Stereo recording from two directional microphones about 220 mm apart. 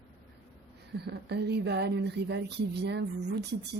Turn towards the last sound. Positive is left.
turn(degrees=-50)  # may be behind; listen again after turning